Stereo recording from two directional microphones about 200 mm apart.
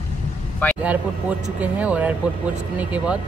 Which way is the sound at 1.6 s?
5° right (ahead or behind).